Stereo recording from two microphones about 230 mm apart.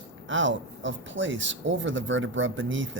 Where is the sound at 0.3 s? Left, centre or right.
Right.